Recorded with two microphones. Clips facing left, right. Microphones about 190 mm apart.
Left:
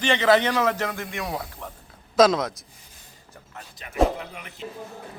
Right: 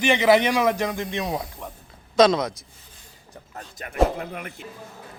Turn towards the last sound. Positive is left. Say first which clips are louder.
# right 1 dB
turn(degrees=-50)  # may be behind; listen again after turning